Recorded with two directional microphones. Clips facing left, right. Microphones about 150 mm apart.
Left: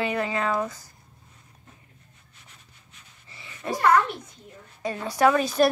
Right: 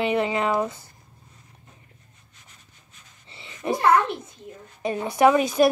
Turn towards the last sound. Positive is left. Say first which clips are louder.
# right 2 dB
turn(degrees=-15)  # may be behind; listen again after turning